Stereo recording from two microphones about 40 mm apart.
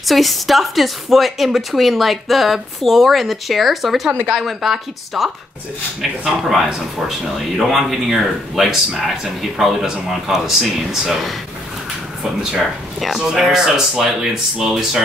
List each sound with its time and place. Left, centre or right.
0.0 s speech: centre
7.1 s speech: centre
13.2 s speech: centre